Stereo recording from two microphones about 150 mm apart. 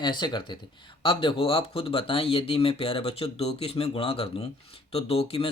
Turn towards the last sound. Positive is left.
turn(degrees=40)  # may be behind; listen again after turning